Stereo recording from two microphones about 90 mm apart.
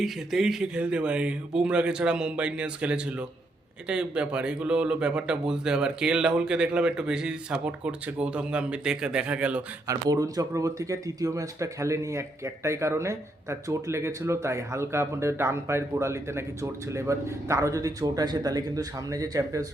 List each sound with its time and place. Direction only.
0.0 s speech: 5° right (ahead or behind)
9.8 s speech: 40° right (ahead or behind)